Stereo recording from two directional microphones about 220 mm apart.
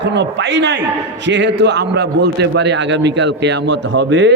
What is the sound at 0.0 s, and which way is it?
A man's voice, 50° right (ahead or behind).